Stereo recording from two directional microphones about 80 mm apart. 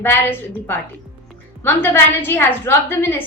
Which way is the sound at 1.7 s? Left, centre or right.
Left.